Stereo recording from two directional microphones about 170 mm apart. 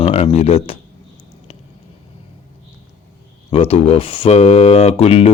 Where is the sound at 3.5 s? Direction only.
35° left (ahead or behind).